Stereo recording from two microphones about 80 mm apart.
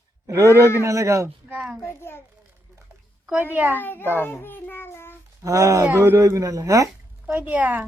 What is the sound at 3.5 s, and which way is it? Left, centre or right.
Speech, right.